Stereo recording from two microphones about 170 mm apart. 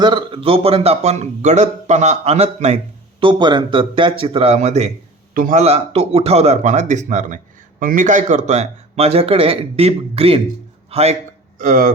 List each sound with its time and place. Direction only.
0.0 s speech: 30° right (ahead or behind)
3.2 s a man's voice: 30° right (ahead or behind); by 11.9 s 55° right (ahead or behind)